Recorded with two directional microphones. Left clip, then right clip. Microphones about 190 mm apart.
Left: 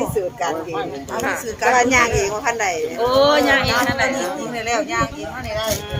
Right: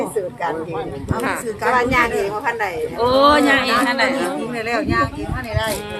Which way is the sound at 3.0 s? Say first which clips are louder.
Right 2 dB; 45° right (ahead or behind).